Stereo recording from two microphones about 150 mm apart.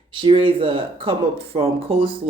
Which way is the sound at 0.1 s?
35° right (ahead or behind).